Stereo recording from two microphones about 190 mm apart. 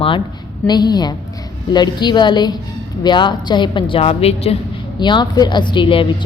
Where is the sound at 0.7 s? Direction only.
20° left (ahead or behind).